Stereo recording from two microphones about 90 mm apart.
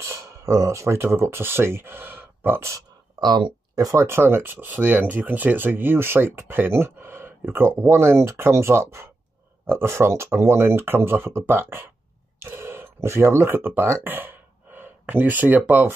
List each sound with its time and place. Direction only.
0.0 s speech: 30° right (ahead or behind)
3.2 s speech: 55° right (ahead or behind)
3.9 s speech: 30° right (ahead or behind)